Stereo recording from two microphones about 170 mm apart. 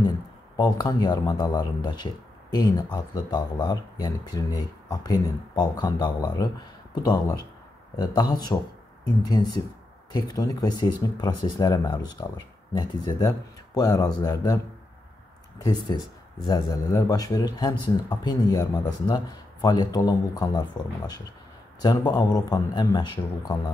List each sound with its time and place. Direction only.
0.6 s speech: 25° left (ahead or behind)
15.6 s speech: 25° left (ahead or behind)
21.8 s speech: 25° left (ahead or behind)